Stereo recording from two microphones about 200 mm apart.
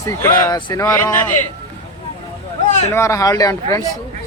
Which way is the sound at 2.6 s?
35° left (ahead or behind).